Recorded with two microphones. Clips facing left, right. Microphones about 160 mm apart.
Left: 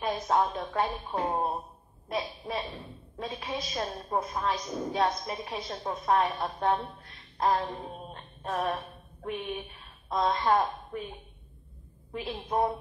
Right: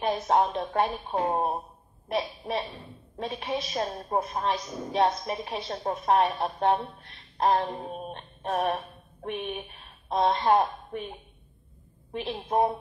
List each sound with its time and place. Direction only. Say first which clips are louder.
0.0 s a woman's voice: right 3 dB; 25° right (ahead or behind)
12.1 s a woman's voice: right 3 dB; 30° right (ahead or behind)